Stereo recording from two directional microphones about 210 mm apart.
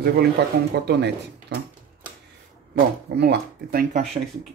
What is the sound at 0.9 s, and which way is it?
Speech, 50° right (ahead or behind).